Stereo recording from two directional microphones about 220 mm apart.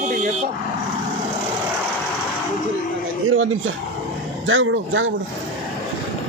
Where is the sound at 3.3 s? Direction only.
65° right (ahead or behind).